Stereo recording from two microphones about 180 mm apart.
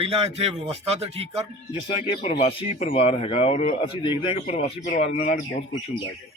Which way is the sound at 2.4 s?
30° left (ahead or behind).